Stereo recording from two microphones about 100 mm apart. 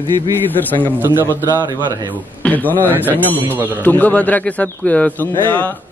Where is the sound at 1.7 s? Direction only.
40° right (ahead or behind).